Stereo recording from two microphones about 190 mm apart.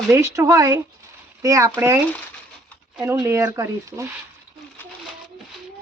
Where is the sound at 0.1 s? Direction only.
15° right (ahead or behind).